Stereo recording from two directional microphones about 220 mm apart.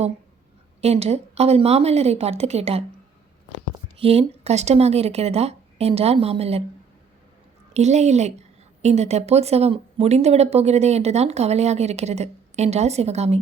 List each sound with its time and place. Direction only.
0.8 s a woman's voice: 30° right (ahead or behind)
3.9 s a woman's voice: 25° right (ahead or behind)
7.7 s a woman's voice: 30° right (ahead or behind)